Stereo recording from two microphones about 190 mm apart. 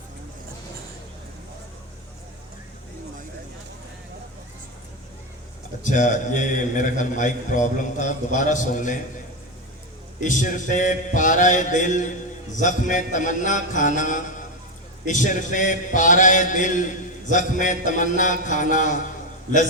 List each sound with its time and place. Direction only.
5.8 s a man's voice: 40° left (ahead or behind)
10.2 s a man's voice: 40° left (ahead or behind)